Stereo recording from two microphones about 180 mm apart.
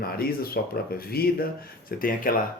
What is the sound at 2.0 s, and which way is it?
Speech, 50° left (ahead or behind).